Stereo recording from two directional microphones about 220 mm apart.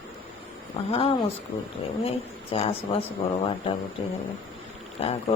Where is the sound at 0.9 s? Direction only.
25° left (ahead or behind).